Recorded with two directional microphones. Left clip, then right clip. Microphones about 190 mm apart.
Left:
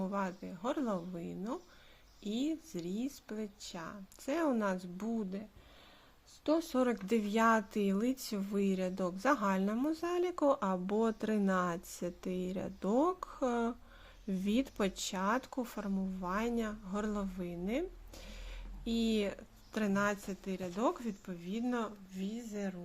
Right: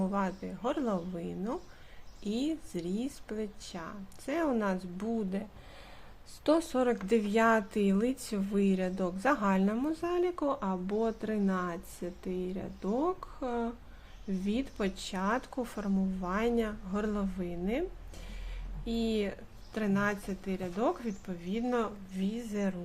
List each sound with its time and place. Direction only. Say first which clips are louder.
0.0 s speech: right 4 dB; 10° left (ahead or behind)
6.4 s speech: right 4 dB; 5° left (ahead or behind)
18.9 s speech: right 2 dB; 30° left (ahead or behind); by 22.7 s centre (ahead or behind)